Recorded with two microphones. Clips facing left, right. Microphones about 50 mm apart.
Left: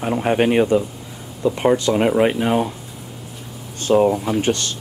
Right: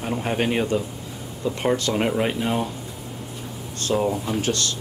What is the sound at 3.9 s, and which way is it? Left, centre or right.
Speech, left.